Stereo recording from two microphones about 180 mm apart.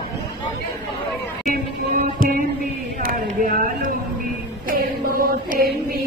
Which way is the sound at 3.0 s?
50° right (ahead or behind).